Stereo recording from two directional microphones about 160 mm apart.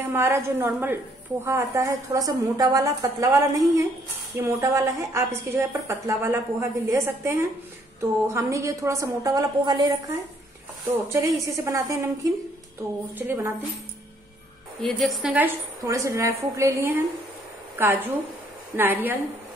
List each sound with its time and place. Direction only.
0.0 s a woman's voice: 15° right (ahead or behind)
14.8 s a woman's voice: centre (ahead or behind)
15.3 s a woman's voice: 15° right (ahead or behind)